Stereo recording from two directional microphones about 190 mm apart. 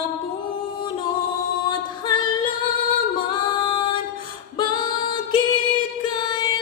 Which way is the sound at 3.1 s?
25° left (ahead or behind).